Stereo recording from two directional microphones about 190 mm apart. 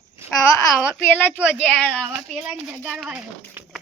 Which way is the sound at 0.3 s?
15° left (ahead or behind).